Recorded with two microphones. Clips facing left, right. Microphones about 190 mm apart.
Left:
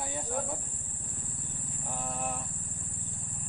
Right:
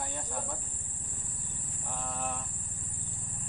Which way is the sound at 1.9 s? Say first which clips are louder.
Left 1 dB; 15° left (ahead or behind).